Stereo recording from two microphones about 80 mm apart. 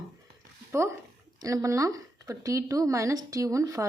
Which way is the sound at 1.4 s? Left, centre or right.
Right.